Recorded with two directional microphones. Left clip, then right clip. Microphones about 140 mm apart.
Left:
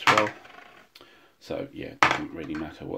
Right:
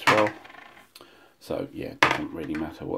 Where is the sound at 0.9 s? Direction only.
25° right (ahead or behind).